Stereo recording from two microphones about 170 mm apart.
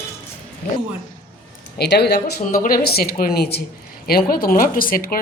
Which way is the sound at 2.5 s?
55° left (ahead or behind).